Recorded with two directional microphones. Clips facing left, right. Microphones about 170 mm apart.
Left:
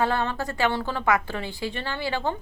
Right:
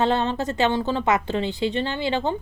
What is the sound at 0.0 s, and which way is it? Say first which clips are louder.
A woman's voice: right 3 dB; 20° right (ahead or behind).